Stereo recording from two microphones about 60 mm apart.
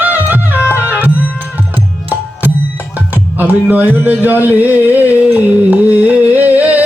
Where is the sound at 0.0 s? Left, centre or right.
Right.